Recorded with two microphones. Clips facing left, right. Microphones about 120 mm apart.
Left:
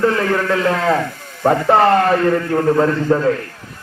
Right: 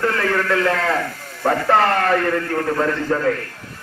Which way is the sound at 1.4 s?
25° left (ahead or behind).